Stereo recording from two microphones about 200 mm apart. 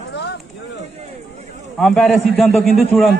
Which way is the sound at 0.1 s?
60° left (ahead or behind).